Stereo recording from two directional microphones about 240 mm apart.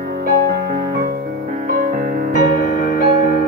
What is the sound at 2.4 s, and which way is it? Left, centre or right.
Music, left.